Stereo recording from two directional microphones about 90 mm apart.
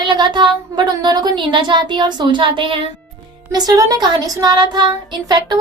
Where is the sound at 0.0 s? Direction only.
55° right (ahead or behind).